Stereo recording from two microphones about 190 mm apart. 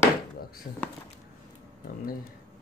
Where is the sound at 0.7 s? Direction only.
40° left (ahead or behind).